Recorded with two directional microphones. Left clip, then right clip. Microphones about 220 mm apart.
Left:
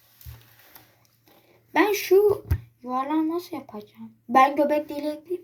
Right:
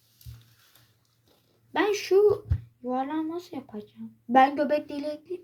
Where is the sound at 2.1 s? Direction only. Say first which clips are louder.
Left 2 dB; 10° left (ahead or behind).